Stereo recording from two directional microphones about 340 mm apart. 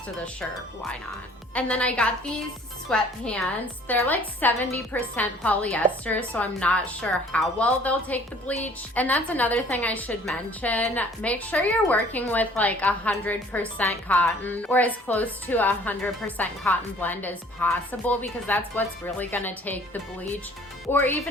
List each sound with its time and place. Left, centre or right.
1.5 s a woman's voice: centre